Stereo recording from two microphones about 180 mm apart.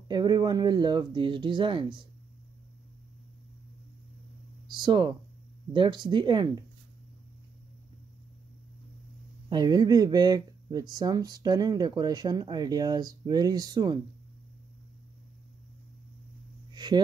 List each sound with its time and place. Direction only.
0.1 s speech: 20° right (ahead or behind)
4.7 s speech: 25° right (ahead or behind)
9.5 s speech: 25° right (ahead or behind)
16.7 s a sound: 25° right (ahead or behind)